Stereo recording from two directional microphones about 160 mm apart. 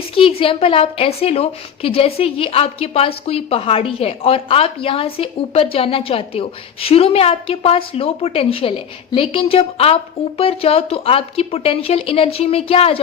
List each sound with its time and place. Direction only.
0.1 s a woman's voice: 35° left (ahead or behind)